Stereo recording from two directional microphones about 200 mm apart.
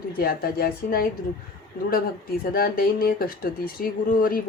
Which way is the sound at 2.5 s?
50° left (ahead or behind).